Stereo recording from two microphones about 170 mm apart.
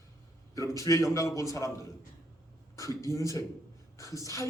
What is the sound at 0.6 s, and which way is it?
A man's voice, 20° left (ahead or behind).